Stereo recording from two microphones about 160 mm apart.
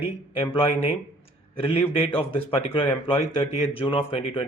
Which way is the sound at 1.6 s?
40° left (ahead or behind).